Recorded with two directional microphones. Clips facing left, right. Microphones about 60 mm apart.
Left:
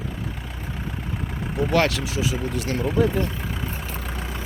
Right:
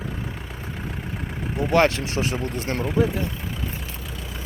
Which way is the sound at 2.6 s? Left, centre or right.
Right.